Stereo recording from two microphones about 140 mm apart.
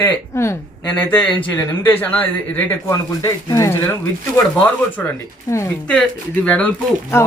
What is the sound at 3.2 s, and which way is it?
Speech, 25° left (ahead or behind).